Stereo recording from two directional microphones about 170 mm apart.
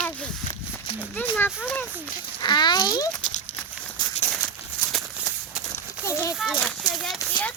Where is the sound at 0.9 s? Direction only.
10° left (ahead or behind).